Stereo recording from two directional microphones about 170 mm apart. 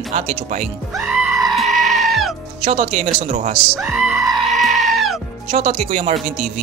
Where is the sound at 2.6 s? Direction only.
40° right (ahead or behind).